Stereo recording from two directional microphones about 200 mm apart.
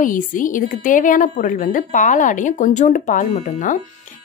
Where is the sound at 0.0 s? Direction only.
40° left (ahead or behind).